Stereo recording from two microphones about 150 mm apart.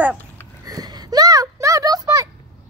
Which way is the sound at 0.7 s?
25° right (ahead or behind).